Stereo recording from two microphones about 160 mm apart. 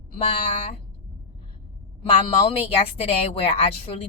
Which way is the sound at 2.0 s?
35° left (ahead or behind).